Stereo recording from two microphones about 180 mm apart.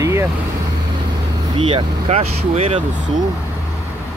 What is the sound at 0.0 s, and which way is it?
Vehicle, 15° right (ahead or behind).